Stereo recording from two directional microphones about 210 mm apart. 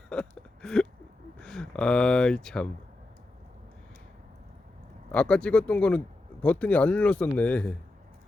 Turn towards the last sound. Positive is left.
turn(degrees=5)  # may be behind; listen again after turning